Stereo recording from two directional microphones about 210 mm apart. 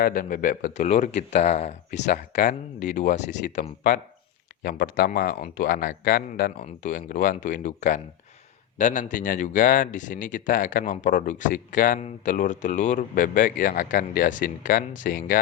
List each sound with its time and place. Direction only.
0.0 s speech: 45° left (ahead or behind)